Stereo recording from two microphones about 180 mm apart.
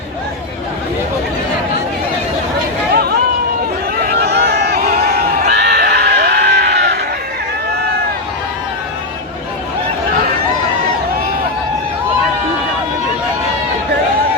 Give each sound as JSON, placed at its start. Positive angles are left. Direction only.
{"t": 3.9, "sound": "crowd", "side_deg": -60}